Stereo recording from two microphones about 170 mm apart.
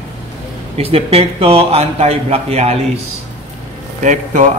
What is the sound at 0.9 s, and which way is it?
A man's voice, 35° right (ahead or behind).